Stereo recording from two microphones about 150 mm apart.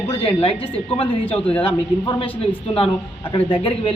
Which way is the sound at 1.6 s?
35° left (ahead or behind).